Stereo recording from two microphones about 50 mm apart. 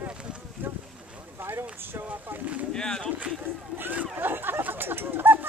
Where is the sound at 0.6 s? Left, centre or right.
Right.